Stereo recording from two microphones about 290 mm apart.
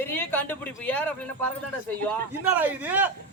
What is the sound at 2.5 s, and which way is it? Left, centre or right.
Speech, centre.